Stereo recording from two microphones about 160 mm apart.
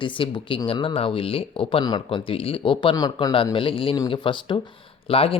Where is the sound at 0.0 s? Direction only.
30° left (ahead or behind).